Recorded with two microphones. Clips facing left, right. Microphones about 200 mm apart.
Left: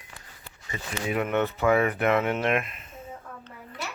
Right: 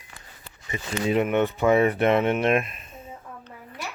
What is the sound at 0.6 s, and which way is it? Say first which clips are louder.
Speech: right 5 dB; 20° right (ahead or behind).